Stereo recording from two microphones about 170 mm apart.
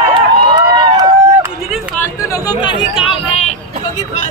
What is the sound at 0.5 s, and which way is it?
Run, 25° right (ahead or behind).